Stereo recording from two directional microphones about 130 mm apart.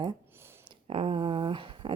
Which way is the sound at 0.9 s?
45° right (ahead or behind).